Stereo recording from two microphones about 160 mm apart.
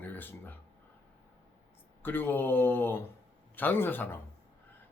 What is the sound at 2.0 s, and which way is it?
Speech, 10° left (ahead or behind).